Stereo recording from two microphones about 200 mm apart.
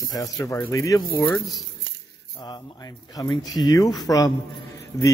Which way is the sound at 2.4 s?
20° left (ahead or behind).